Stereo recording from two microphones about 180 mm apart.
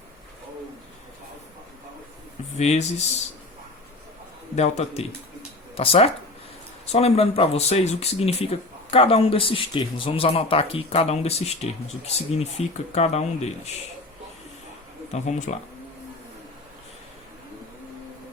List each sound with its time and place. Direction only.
2.6 s speech: 40° left (ahead or behind)
4.5 s speech: 35° left (ahead or behind)
15.1 s speech: 40° left (ahead or behind)